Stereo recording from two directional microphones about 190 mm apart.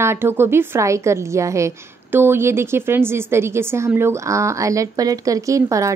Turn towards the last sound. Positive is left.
turn(degrees=-15)  # may be behind; listen again after turning